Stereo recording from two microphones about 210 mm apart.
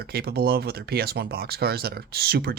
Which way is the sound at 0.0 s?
50° right (ahead or behind).